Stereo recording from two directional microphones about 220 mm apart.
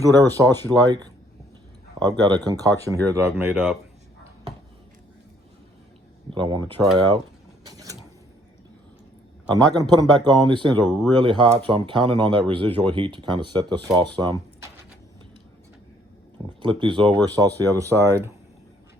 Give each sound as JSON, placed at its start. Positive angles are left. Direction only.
{"t": 0.0, "sound": "speech", "side_deg": -15}
{"t": 6.3, "sound": "speech", "side_deg": -20}
{"t": 7.6, "sound": "a sound", "side_deg": -15}
{"t": 9.5, "sound": "speech", "side_deg": -20}
{"t": 16.6, "sound": "speech", "side_deg": -20}